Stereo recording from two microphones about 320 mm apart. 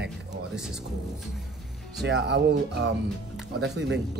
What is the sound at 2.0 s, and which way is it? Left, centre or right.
Speech, right.